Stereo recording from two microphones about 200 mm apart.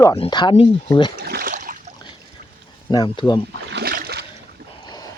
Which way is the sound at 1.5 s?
40° right (ahead or behind).